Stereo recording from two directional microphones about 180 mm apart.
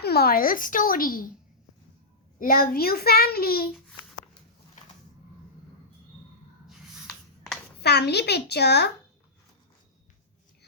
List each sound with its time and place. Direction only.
0.0 s speech: 60° left (ahead or behind)
2.4 s a child's voice: 55° left (ahead or behind)
6.7 s a sound: centre (ahead or behind)
7.8 s a child's voice: 65° left (ahead or behind)